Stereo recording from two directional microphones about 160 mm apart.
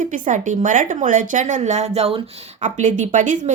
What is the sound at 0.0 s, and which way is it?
Speech, 55° right (ahead or behind).